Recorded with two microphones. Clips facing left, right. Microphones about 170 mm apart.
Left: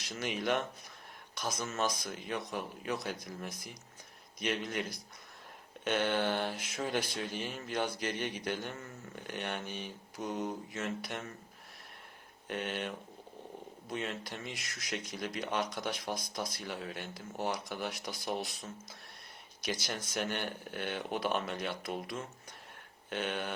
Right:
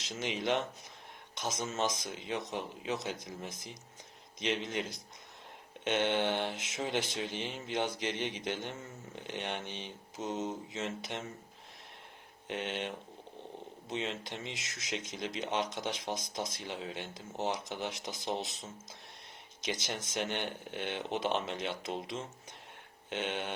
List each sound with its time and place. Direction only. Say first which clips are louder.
0.0 s speech: even; 20° right (ahead or behind)
12.5 s speech: even; 20° right (ahead or behind)